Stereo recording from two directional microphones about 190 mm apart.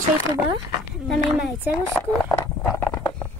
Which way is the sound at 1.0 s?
Centre (ahead or behind).